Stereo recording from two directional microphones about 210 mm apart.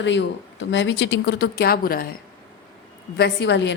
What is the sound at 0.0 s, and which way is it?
Speech, 60° left (ahead or behind).